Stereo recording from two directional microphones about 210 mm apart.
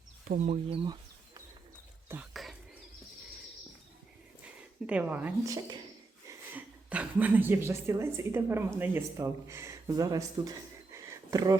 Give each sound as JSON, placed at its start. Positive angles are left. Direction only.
{"t": 0.3, "sound": "speech", "side_deg": -35}
{"t": 2.3, "sound": "bird", "side_deg": 0}
{"t": 4.4, "sound": "speech", "side_deg": -5}
{"t": 10.9, "sound": "a sound", "side_deg": -15}